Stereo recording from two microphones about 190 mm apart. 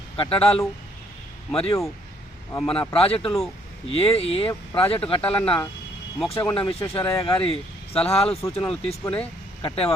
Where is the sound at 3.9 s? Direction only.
30° left (ahead or behind).